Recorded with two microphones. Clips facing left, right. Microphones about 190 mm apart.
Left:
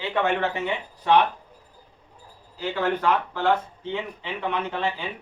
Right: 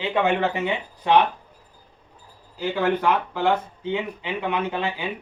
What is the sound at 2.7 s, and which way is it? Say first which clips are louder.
Speech: right 2 dB; 15° right (ahead or behind).